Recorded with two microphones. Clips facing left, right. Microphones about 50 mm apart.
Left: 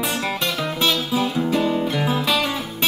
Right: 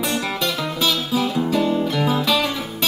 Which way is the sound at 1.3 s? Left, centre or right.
Centre.